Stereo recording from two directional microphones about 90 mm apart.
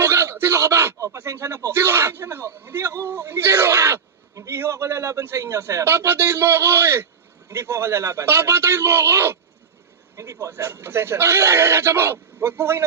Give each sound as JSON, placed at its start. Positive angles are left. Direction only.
{"t": 0.0, "sound": "speech", "side_deg": -30}
{"t": 10.4, "sound": "speech", "side_deg": -30}